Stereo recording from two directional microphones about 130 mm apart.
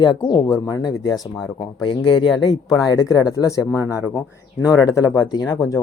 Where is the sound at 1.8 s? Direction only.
40° left (ahead or behind); by 3.8 s 25° left (ahead or behind).